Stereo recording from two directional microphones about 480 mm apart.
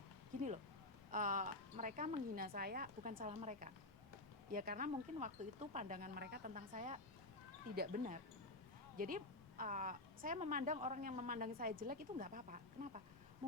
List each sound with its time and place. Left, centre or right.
1.1 s a woman's voice: centre